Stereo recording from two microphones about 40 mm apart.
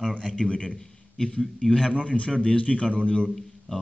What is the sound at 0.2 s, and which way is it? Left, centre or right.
A man's voice, left.